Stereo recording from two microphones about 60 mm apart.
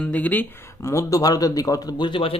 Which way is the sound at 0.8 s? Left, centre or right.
Left.